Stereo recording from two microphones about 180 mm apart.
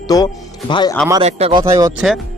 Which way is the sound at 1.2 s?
35° right (ahead or behind).